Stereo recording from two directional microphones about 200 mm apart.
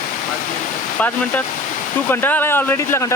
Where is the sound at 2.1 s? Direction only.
10° left (ahead or behind).